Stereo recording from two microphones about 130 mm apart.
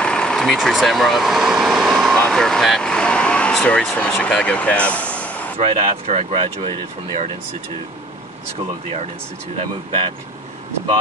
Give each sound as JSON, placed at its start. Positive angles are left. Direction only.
{"t": 0.0, "sound": "speech", "side_deg": 5}
{"t": 5.6, "sound": "speech", "side_deg": -50}
{"t": 9.6, "sound": "speech", "side_deg": -45}